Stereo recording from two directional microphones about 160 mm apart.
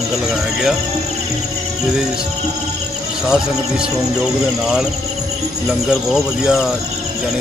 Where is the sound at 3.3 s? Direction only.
5° right (ahead or behind).